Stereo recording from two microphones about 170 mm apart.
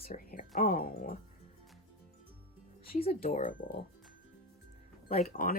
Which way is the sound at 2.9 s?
35° left (ahead or behind).